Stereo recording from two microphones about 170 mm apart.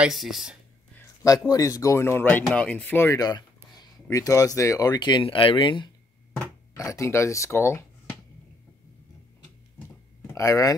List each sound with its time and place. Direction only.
0.0 s speech: centre (ahead or behind)
0.9 s speech: 20° left (ahead or behind)
6.7 s speech: 20° left (ahead or behind)
9.8 s a sound: 15° left (ahead or behind)